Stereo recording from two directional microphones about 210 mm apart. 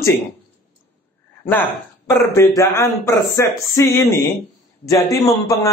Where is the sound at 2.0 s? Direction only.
15° left (ahead or behind).